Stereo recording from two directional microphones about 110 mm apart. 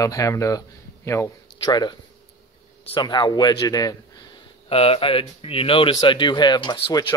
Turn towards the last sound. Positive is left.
turn(degrees=40)  # may be behind; listen again after turning